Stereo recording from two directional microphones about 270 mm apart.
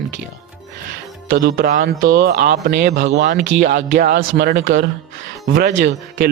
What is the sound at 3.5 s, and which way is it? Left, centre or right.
Speech, right.